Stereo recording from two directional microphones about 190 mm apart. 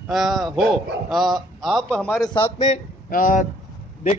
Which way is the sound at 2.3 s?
30° left (ahead or behind).